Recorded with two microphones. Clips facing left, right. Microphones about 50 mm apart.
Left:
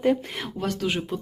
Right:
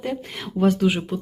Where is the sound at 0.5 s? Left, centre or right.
Centre.